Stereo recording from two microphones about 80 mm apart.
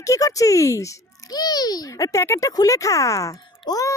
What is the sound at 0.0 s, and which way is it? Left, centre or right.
A child's voice, left.